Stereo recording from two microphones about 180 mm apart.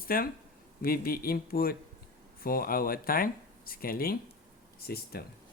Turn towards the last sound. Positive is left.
turn(degrees=60)  # may be behind; listen again after turning